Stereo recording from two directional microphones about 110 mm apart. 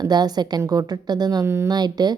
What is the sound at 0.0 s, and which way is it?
A woman's voice, 40° right (ahead or behind).